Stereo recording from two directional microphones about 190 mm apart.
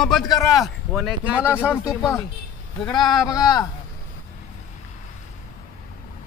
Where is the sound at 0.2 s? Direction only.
20° left (ahead or behind).